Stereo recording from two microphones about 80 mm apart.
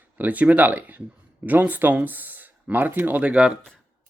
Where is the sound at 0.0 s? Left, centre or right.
Right.